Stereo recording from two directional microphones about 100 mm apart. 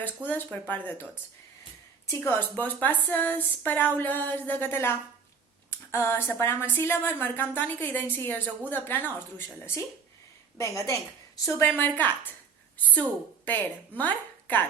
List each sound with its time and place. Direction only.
0.3 s a woman's voice: 15° left (ahead or behind)
2.0 s speech: 20° left (ahead or behind)
10.6 s a woman's voice: 30° left (ahead or behind)
11.8 s a woman's voice: 15° left (ahead or behind)